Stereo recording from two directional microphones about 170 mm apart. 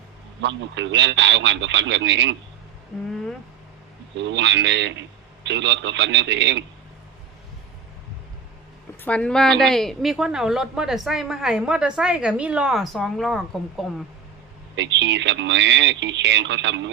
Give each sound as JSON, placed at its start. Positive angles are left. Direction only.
{"t": 0.4, "sound": "a man's voice", "side_deg": -90}
{"t": 4.2, "sound": "a man's voice", "side_deg": -90}
{"t": 9.0, "sound": "a woman's voice", "side_deg": 5}
{"t": 14.8, "sound": "a man's voice", "side_deg": -90}